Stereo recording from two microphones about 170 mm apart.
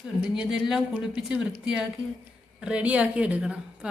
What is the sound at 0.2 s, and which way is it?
A woman's voice, 5° right (ahead or behind).